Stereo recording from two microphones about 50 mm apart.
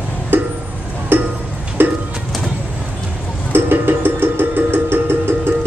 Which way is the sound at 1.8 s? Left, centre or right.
Right.